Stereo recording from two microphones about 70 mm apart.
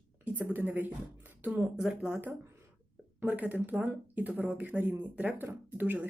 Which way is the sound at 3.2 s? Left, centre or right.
Right.